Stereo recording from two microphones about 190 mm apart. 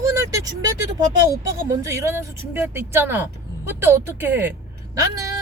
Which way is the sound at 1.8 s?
15° right (ahead or behind).